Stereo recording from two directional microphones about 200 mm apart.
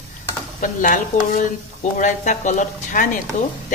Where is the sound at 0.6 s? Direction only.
40° left (ahead or behind).